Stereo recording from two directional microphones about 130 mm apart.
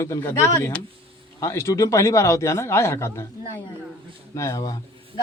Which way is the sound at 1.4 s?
20° left (ahead or behind).